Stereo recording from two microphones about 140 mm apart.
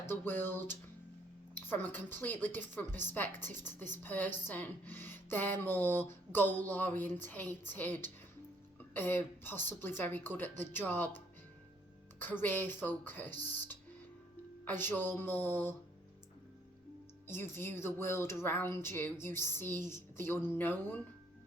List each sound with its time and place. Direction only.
0.0 s speech: 15° left (ahead or behind)
12.2 s speech: 15° left (ahead or behind)
17.2 s speech: 15° left (ahead or behind)